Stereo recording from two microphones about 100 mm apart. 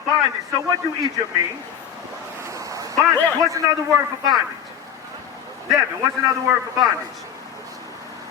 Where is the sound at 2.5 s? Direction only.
35° right (ahead or behind).